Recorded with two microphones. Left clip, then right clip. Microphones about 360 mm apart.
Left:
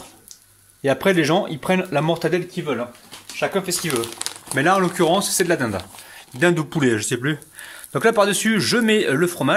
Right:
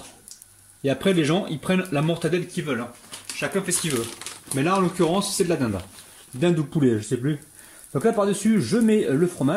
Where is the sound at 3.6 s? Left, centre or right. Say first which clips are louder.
Left 3 dB; centre.